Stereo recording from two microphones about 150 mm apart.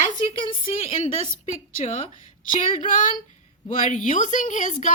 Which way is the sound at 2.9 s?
60° left (ahead or behind).